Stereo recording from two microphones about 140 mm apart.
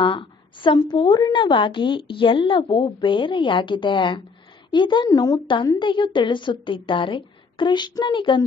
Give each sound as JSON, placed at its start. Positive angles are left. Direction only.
{"t": 0.0, "sound": "a woman's voice", "side_deg": 35}